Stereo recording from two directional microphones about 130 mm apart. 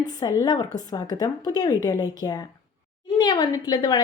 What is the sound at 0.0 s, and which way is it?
Speech, 30° left (ahead or behind).